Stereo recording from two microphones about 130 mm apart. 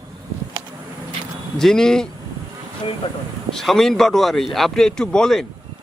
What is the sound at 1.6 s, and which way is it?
Speech, 5° left (ahead or behind).